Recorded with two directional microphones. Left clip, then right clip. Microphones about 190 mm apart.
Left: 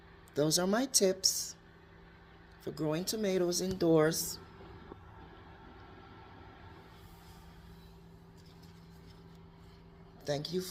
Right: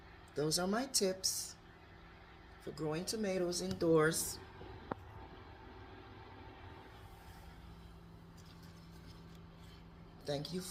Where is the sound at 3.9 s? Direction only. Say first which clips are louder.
Left 3 dB; 30° left (ahead or behind).